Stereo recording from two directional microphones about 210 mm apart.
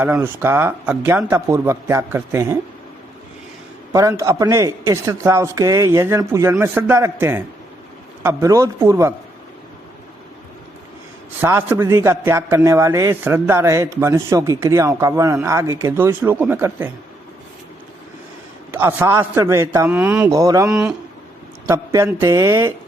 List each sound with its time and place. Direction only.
0.0 s a man's voice: 10° right (ahead or behind)
3.9 s a man's voice: 15° right (ahead or behind)
11.3 s a man's voice: 10° right (ahead or behind)
18.7 s a man's voice: 10° right (ahead or behind)
20.7 s a man's voice: 5° right (ahead or behind)